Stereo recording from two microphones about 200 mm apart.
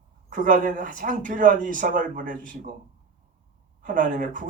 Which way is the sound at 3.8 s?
40° right (ahead or behind).